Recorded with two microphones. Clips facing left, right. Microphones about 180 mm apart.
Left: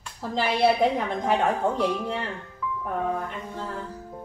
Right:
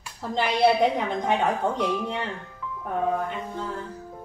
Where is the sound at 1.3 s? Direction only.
Centre (ahead or behind).